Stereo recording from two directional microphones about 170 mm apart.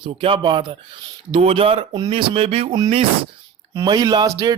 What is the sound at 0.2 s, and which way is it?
Speech, 30° right (ahead or behind).